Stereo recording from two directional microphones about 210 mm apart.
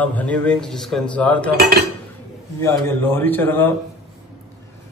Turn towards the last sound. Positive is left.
turn(degrees=10)  # may be behind; listen again after turning